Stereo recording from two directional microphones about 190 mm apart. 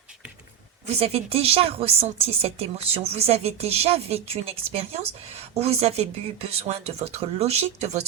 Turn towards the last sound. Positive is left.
turn(degrees=-35)  # may be behind; listen again after turning